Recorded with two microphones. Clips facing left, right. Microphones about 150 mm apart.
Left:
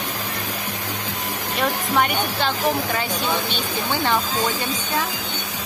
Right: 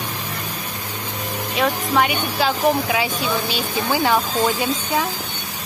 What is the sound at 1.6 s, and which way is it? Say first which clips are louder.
Speech: right 2 dB; 5° right (ahead or behind).